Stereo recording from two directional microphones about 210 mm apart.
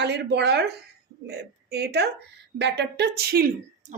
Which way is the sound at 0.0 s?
55° right (ahead or behind).